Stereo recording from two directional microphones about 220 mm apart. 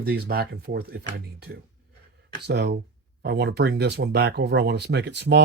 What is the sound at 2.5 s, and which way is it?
Speech, 50° right (ahead or behind).